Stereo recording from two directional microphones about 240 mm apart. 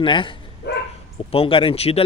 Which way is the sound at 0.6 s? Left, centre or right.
Left.